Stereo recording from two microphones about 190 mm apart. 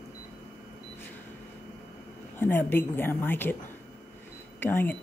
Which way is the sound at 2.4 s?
10° left (ahead or behind).